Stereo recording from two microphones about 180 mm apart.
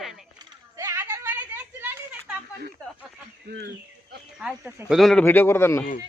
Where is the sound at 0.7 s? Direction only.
15° right (ahead or behind).